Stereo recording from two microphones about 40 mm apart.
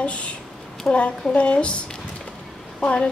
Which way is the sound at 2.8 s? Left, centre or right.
Left.